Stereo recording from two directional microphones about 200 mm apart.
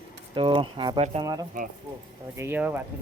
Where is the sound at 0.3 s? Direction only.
25° right (ahead or behind).